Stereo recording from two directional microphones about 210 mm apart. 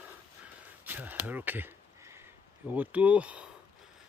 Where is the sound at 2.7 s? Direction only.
5° right (ahead or behind).